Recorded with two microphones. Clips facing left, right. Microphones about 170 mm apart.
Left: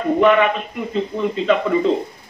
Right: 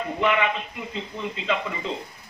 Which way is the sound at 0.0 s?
55° left (ahead or behind).